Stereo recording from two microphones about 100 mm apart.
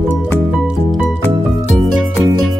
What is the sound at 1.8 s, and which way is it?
Music, centre (ahead or behind).